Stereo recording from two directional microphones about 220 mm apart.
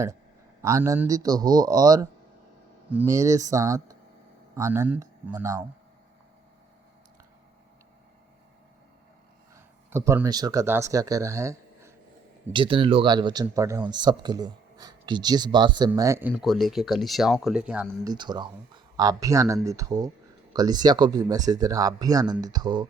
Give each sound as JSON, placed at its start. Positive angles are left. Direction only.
{"t": 0.6, "sound": "speech", "side_deg": -15}
{"t": 9.6, "sound": "speech", "side_deg": -10}
{"t": 12.5, "sound": "speech", "side_deg": -25}
{"t": 18.0, "sound": "speech", "side_deg": -20}